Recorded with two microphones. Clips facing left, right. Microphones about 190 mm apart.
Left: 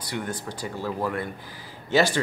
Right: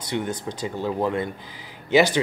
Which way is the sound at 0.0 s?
20° right (ahead or behind).